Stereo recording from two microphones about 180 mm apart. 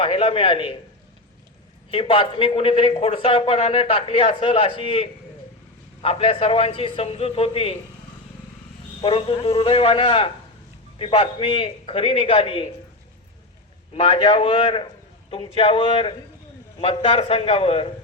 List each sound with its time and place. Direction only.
0.0 s speech: 30° left (ahead or behind)
1.9 s speech: 30° left (ahead or behind)
9.0 s speech: 30° left (ahead or behind)
13.9 s a man's voice: 30° left (ahead or behind)